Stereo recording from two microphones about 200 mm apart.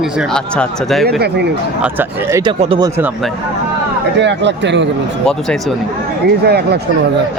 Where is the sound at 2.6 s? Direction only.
25° right (ahead or behind).